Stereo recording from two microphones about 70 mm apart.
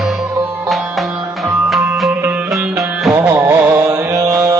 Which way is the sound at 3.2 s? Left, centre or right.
Right.